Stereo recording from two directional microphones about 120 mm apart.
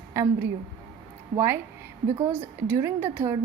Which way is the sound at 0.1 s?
25° right (ahead or behind).